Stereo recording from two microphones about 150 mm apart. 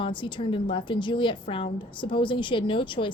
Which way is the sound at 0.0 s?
30° left (ahead or behind).